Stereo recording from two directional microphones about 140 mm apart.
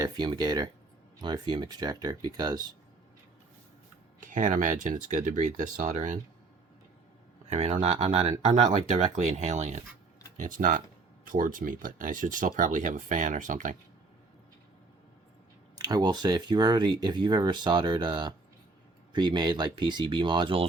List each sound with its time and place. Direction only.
0.0 s speech: 30° right (ahead or behind)
4.2 s speech: 65° right (ahead or behind)
7.4 s speech: 50° right (ahead or behind)
10.3 s speech: 70° right (ahead or behind)
15.8 s speech: 30° right (ahead or behind)